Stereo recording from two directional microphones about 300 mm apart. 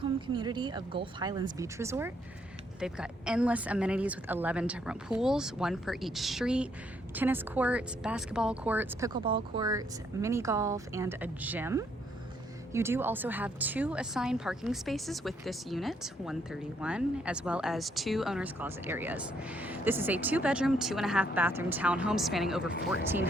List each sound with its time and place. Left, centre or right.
0.0 s speech: centre